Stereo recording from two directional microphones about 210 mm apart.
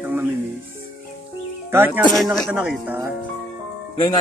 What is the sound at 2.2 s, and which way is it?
Speech, centre (ahead or behind).